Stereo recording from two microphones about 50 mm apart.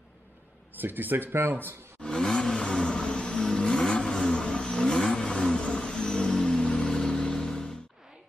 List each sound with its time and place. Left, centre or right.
0.7 s speech: right
2.0 s vehicle: centre